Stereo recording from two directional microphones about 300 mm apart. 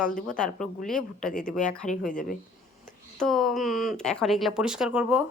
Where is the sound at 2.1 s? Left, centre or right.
Left.